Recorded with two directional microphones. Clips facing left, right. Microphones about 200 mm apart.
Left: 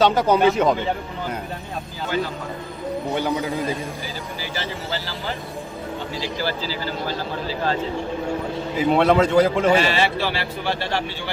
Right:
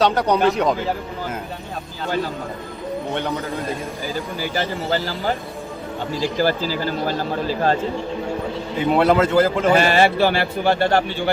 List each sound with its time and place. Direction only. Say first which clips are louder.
0.0 s a man's voice: left 1 dB; centre (ahead or behind)
3.2 s a man's voice: left 2 dB; centre (ahead or behind)
4.4 s a man's voice: right 5 dB; 50° right (ahead or behind)
8.7 s a man's voice: right 1 dB; centre (ahead or behind)
9.7 s a man's voice: right 4 dB; 50° right (ahead or behind)